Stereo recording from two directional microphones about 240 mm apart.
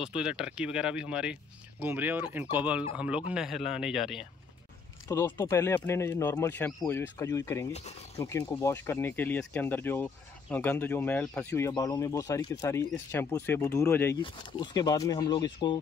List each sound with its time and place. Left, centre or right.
0.0 s speech: centre
5.0 s speech: centre